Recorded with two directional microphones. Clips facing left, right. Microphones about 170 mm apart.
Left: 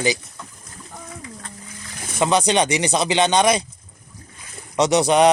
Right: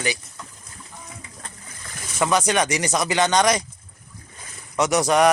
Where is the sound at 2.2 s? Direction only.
20° left (ahead or behind).